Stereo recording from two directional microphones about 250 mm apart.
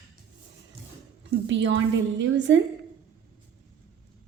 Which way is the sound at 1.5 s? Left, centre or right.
Right.